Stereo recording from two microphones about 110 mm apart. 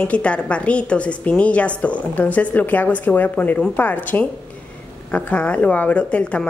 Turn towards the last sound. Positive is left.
turn(degrees=10)  # may be behind; listen again after turning